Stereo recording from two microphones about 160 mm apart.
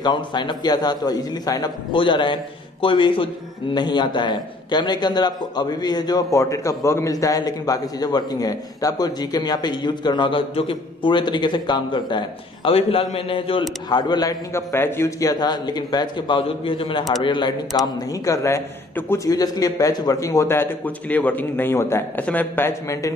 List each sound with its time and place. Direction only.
0.0 s a man's voice: 30° left (ahead or behind)